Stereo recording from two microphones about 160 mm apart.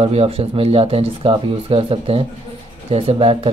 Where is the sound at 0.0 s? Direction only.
40° right (ahead or behind).